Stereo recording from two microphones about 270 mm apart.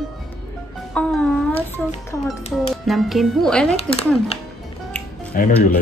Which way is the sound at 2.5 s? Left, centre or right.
Centre.